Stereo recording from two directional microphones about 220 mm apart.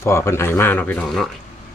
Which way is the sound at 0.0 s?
10° left (ahead or behind).